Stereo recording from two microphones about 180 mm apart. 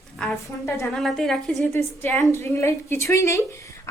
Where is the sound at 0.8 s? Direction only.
Centre (ahead or behind).